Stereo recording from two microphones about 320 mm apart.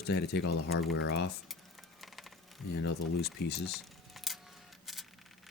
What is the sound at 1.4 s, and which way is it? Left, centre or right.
Typing, centre.